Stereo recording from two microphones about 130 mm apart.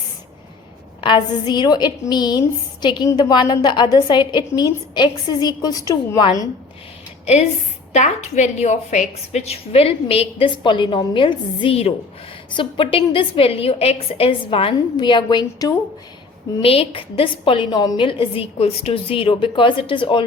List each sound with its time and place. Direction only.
1.0 s a woman's voice: 35° left (ahead or behind)
7.9 s a woman's voice: 65° left (ahead or behind); by 15.7 s 30° left (ahead or behind)
16.6 s a woman's voice: 45° left (ahead or behind)